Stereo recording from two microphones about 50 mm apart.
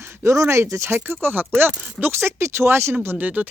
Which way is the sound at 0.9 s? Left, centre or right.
Right.